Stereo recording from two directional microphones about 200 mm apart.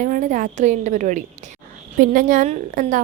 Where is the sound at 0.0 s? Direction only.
40° right (ahead or behind).